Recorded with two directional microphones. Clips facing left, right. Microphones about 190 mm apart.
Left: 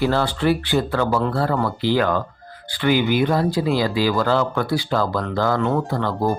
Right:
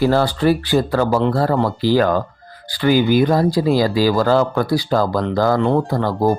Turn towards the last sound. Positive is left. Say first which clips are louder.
# right 4 dB
turn(degrees=-35)  # may be behind; listen again after turning